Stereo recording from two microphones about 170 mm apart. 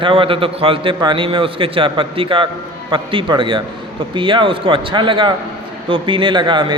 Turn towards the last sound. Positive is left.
turn(degrees=-30)  # may be behind; listen again after turning